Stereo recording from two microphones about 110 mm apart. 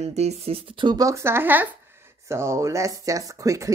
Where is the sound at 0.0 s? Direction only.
90° right; by 0.9 s 55° right (ahead or behind).